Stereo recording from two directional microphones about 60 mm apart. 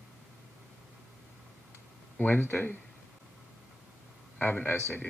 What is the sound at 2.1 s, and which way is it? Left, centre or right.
Speech, left.